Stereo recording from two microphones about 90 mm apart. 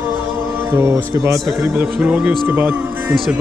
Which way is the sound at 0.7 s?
25° right (ahead or behind).